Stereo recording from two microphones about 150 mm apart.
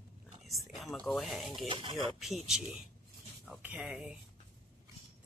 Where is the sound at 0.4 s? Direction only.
Centre (ahead or behind).